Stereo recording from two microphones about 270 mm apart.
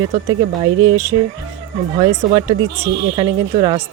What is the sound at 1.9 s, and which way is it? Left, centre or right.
Speech, centre.